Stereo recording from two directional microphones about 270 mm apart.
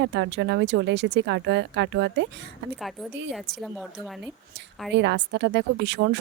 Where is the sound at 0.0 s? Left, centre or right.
Right.